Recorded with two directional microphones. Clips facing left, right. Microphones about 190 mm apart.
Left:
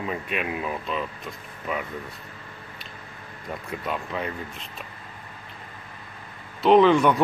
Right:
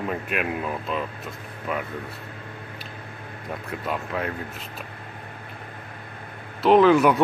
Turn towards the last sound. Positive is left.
turn(degrees=-5)  # may be behind; listen again after turning